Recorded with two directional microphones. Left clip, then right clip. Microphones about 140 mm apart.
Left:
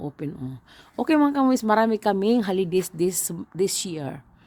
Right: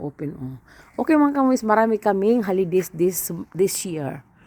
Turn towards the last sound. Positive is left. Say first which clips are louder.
# right 2 dB
turn(degrees=0)  # may be behind; listen again after turning